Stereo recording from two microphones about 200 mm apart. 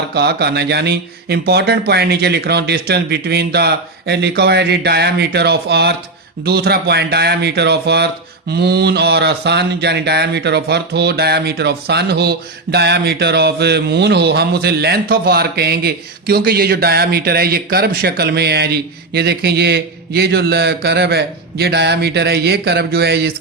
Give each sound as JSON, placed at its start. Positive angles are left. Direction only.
{"t": 0.1, "sound": "speech", "side_deg": -55}